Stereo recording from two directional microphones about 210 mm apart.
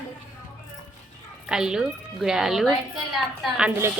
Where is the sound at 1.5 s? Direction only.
5° right (ahead or behind).